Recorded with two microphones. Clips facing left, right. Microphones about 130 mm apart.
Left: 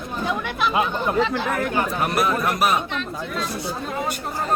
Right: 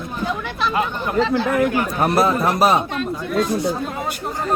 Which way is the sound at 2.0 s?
30° right (ahead or behind).